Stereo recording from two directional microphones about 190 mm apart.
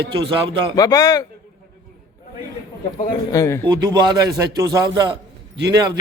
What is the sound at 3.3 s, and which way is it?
Speech, 15° left (ahead or behind).